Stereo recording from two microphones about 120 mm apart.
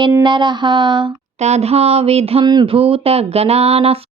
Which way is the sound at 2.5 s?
45° right (ahead or behind).